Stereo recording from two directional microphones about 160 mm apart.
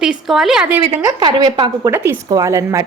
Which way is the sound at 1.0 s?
25° right (ahead or behind).